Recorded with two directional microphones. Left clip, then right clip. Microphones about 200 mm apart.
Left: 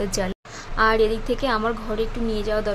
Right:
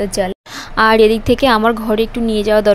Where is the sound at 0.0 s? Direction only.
20° right (ahead or behind).